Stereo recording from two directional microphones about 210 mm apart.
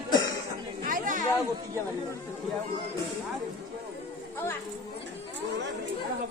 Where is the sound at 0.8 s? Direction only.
40° right (ahead or behind).